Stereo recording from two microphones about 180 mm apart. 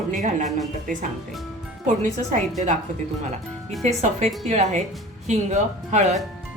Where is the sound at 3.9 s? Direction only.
40° right (ahead or behind).